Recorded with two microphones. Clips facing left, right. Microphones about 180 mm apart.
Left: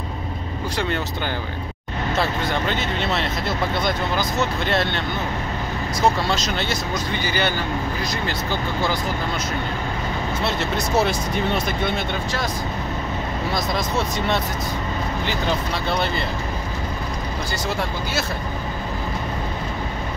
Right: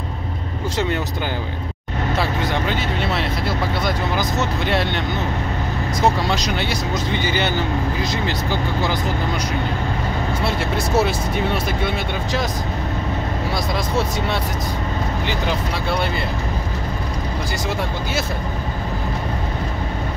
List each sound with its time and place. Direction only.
2.7 s speech: 10° right (ahead or behind)
6.2 s speech: 15° right (ahead or behind)
10.4 s speech: 5° right (ahead or behind)